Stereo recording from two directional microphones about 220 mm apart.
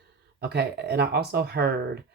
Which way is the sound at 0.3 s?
45° right (ahead or behind).